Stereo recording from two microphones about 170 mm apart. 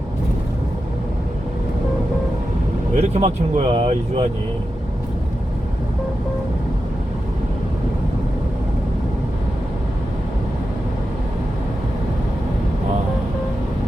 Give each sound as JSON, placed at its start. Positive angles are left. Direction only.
{"t": 2.9, "sound": "speech", "side_deg": -40}